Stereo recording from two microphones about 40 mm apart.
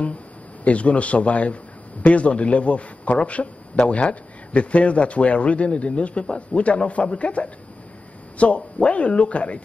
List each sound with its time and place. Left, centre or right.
0.7 s a man's voice: left